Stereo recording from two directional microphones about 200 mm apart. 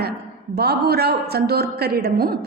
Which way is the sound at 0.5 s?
50° right (ahead or behind).